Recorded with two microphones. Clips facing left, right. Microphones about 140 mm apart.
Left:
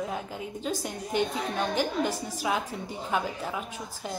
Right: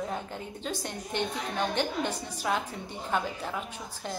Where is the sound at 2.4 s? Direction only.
5° left (ahead or behind).